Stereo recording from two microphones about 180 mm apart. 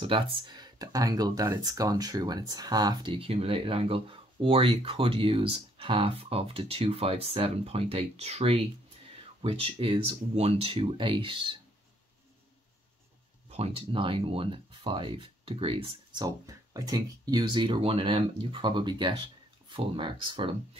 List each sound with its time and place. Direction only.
0.0 s speech: 30° right (ahead or behind)
13.5 s speech: 35° right (ahead or behind)